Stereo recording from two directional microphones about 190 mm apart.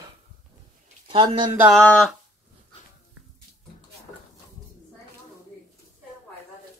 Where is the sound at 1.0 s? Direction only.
25° right (ahead or behind).